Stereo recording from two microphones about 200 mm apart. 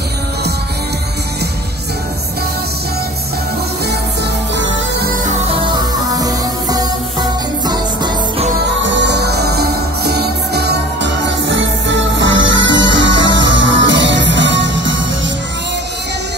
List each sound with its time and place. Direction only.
6.1 s music: 20° right (ahead or behind)
8.8 s music: 60° right (ahead or behind)